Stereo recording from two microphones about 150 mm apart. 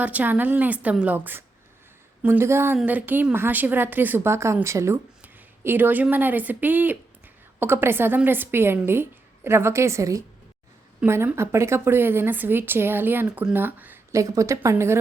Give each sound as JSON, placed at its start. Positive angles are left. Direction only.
{"t": 0.0, "sound": "a woman's voice", "side_deg": -10}